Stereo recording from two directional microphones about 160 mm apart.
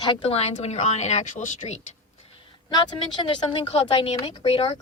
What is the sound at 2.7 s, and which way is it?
A woman's voice, 25° left (ahead or behind).